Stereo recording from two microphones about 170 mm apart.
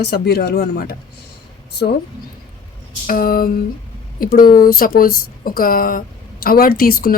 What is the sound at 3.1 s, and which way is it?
A woman's voice, 55° left (ahead or behind).